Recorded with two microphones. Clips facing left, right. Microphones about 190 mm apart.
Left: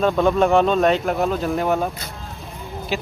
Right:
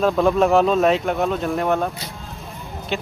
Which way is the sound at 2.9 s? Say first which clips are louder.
Even; centre (ahead or behind).